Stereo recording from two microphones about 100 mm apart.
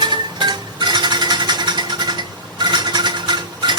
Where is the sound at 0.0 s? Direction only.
45° right (ahead or behind).